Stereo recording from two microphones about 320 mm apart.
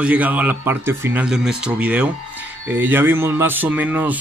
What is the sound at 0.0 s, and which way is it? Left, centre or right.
Speech, centre.